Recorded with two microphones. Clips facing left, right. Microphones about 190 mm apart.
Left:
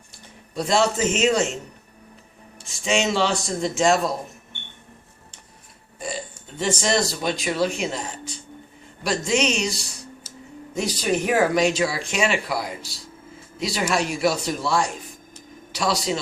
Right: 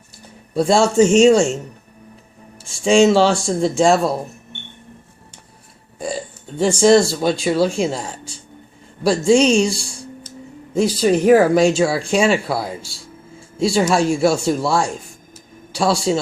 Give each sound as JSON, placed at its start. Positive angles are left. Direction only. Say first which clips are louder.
{"t": 0.5, "sound": "a man's voice", "louder": "right 7 dB", "side_deg": -30}
{"t": 2.6, "sound": "speech", "louder": "right 10 dB", "side_deg": -30}
{"t": 6.6, "sound": "speech", "louder": "right 10 dB", "side_deg": -30}